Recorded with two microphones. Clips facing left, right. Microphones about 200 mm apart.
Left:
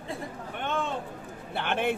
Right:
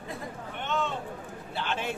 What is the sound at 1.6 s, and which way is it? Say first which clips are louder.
Speech: left 5 dB; 55° left (ahead or behind).